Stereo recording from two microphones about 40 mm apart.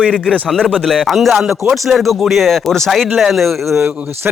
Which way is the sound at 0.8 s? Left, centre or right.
Centre.